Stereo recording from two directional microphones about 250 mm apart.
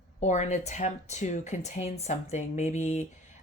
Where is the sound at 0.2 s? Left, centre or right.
Left.